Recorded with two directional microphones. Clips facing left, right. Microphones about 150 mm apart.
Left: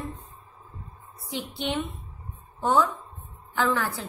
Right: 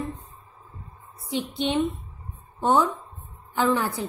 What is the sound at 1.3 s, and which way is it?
A woman's voice, 20° right (ahead or behind).